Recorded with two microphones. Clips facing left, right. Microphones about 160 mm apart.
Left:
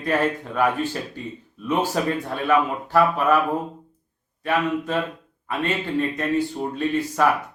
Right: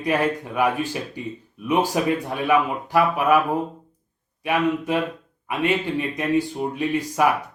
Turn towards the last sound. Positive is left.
turn(degrees=-15)  # may be behind; listen again after turning